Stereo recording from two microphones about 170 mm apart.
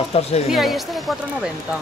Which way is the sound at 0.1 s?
35° left (ahead or behind).